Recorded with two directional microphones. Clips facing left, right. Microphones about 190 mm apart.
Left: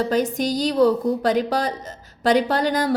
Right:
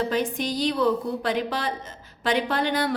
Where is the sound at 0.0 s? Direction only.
40° left (ahead or behind).